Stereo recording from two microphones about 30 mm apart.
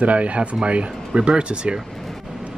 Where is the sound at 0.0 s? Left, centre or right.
Right.